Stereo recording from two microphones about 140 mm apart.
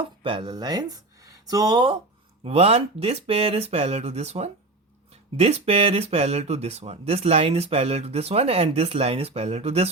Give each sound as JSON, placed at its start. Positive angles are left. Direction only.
{"t": 0.2, "sound": "speech", "side_deg": -35}
{"t": 2.4, "sound": "speech", "side_deg": -45}